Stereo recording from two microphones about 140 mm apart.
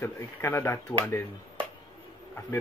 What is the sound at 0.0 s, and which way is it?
Speech, 15° left (ahead or behind).